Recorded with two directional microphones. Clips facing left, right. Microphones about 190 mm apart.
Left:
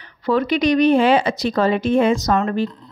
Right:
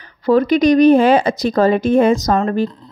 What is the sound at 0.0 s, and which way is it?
Speech, 40° right (ahead or behind).